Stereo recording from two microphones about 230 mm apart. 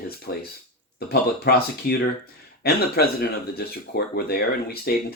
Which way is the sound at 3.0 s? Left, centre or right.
Left.